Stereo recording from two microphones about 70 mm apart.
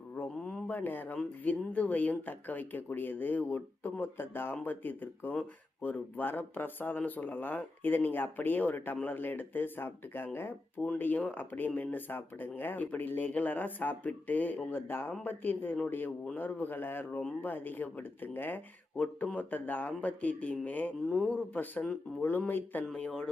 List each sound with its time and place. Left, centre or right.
0.4 s a sound: left
1.5 s speech: left
21.1 s speech: centre
21.5 s speech: left
23.0 s speech: centre